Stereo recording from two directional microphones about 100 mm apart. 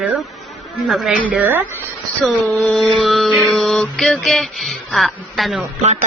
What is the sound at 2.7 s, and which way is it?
Mantra, centre (ahead or behind).